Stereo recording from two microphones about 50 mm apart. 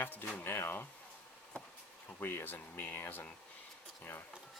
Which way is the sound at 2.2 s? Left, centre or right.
Left.